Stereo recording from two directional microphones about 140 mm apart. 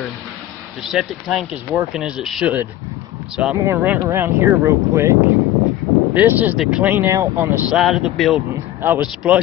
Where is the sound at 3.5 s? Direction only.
20° right (ahead or behind).